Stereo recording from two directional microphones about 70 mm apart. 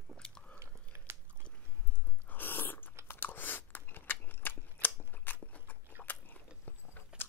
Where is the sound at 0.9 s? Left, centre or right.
Right.